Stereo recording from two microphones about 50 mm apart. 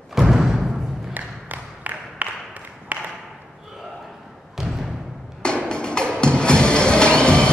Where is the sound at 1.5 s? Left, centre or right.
Right.